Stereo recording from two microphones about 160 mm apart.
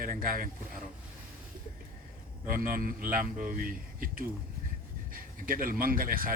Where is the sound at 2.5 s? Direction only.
60° right (ahead or behind).